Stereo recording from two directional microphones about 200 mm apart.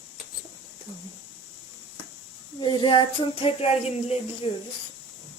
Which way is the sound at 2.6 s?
20° left (ahead or behind).